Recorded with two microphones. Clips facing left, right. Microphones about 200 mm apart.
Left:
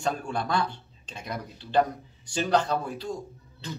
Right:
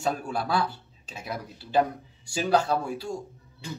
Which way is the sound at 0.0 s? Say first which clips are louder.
Right 1 dB; 5° right (ahead or behind).